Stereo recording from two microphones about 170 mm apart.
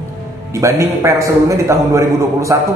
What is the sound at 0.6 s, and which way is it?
A man's voice, 15° right (ahead or behind).